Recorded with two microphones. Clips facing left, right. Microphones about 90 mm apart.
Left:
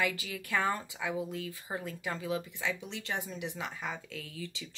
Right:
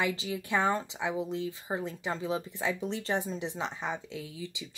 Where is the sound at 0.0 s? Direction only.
20° right (ahead or behind).